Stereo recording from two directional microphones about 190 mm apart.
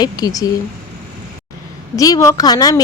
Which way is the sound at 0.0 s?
20° left (ahead or behind).